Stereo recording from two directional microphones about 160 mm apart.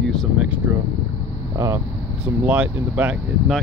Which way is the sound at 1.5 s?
20° right (ahead or behind).